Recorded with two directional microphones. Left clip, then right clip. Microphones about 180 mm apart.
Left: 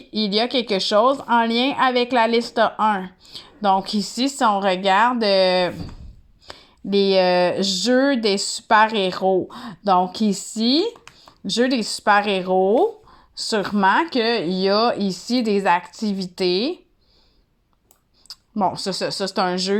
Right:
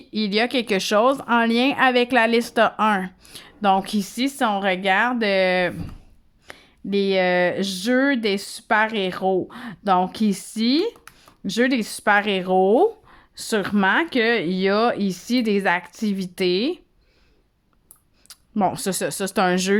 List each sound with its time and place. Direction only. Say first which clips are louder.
0.3 s speech: even; 15° right (ahead or behind)
3.8 s speech: left 2 dB; 40° right (ahead or behind)
6.9 s speech: left 3 dB; 30° right (ahead or behind)
9.2 s speech: left 2 dB; 10° right (ahead or behind)
10.1 s speech: left 2 dB; 40° right (ahead or behind)
12.5 s speech: right 1 dB; 15° right (ahead or behind)
13.1 s a sound: left 2 dB; 45° right (ahead or behind)
13.7 s speech: left 3 dB; 25° right (ahead or behind)
14.1 s speech: even; 40° right (ahead or behind)
14.7 s speech: left 1 dB; 15° right (ahead or behind)
14.9 s speech: left 1 dB; 40° right (ahead or behind)
18.7 s speech: left 1 dB; 55° right (ahead or behind)